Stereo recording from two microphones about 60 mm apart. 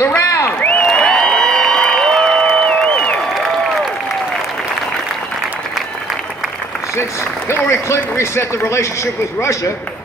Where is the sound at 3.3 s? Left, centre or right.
Centre.